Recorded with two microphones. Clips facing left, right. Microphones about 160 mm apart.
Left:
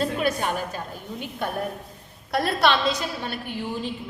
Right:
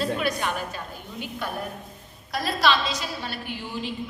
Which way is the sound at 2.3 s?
60° left (ahead or behind).